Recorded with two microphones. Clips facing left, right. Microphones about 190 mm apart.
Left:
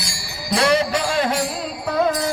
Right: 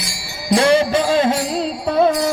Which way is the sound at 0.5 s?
30° right (ahead or behind).